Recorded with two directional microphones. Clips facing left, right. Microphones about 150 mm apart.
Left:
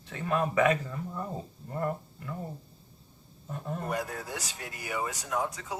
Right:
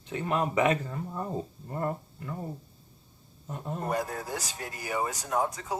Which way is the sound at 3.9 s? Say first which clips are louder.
Right 4 dB; 35° right (ahead or behind).